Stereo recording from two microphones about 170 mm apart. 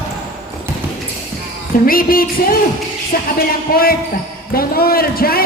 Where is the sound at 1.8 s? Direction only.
60° left (ahead or behind).